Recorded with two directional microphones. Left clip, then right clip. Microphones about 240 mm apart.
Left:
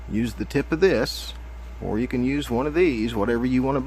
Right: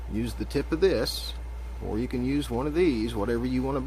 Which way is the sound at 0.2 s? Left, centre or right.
Left.